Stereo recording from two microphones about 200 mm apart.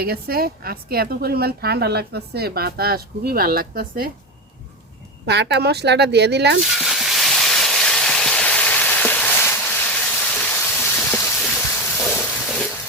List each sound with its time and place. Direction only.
0.0 s speech: 50° right (ahead or behind)
5.2 s speech: 55° right (ahead or behind)
6.6 s frying: centre (ahead or behind)